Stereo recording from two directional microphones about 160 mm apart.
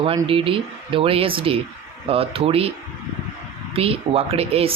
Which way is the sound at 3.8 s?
35° right (ahead or behind).